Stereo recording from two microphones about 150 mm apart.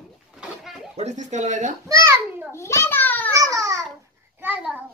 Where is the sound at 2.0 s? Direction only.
20° right (ahead or behind).